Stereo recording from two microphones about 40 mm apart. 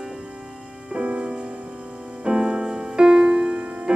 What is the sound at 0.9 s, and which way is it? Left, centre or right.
Music, right.